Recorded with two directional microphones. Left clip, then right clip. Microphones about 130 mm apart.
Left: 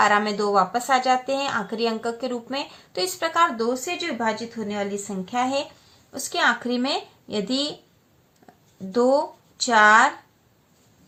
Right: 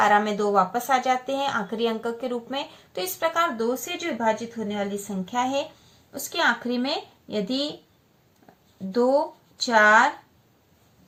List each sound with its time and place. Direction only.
0.0 s a woman's voice: 25° left (ahead or behind); by 7.7 s 40° left (ahead or behind)
8.9 s speech: 45° left (ahead or behind)